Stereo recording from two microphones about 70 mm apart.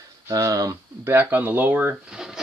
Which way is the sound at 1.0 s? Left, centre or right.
Right.